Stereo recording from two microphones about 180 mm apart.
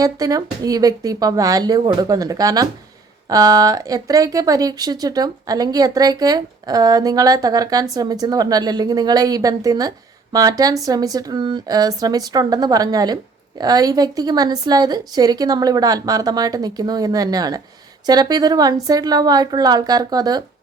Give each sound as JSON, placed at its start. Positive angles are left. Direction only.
{"t": 0.0, "sound": "speech", "side_deg": -20}